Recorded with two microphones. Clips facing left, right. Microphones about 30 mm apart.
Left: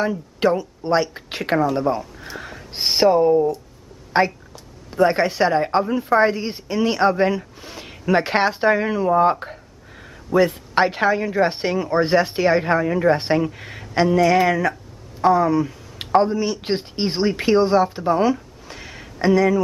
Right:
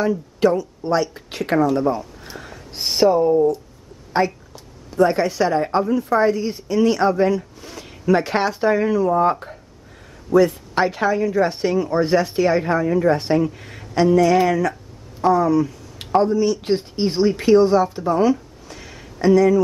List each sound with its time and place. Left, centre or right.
0.0 s a woman's voice: left
2.3 s a sound: centre
2.7 s a woman's voice: left